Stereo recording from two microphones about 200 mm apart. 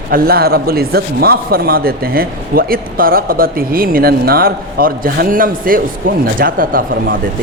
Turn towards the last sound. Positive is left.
turn(degrees=-45)  # may be behind; listen again after turning